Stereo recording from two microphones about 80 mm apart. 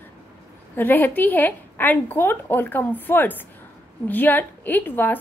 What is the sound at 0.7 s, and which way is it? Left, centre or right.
A woman's voice, left.